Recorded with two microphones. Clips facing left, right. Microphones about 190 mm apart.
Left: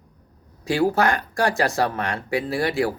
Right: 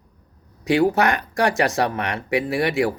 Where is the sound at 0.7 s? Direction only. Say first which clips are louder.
Right 2 dB; 20° right (ahead or behind).